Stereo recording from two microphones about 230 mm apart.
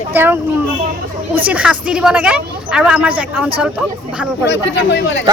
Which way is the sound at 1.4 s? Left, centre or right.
Centre.